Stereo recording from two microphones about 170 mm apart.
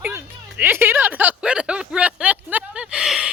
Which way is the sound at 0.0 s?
10° right (ahead or behind).